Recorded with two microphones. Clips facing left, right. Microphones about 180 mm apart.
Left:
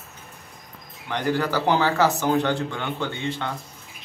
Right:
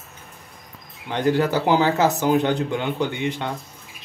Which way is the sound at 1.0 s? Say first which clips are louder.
Right 4 dB; 20° right (ahead or behind).